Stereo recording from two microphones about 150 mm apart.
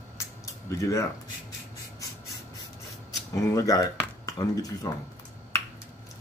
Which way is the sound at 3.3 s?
20° left (ahead or behind).